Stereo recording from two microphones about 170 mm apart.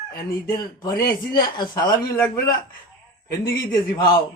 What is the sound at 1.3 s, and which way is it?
Speech, 25° left (ahead or behind).